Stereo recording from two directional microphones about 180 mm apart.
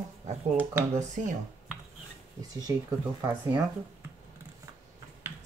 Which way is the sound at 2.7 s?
15° right (ahead or behind).